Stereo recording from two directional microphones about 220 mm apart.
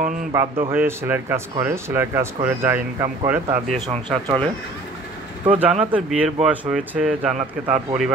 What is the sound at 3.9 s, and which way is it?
Speech, 25° right (ahead or behind).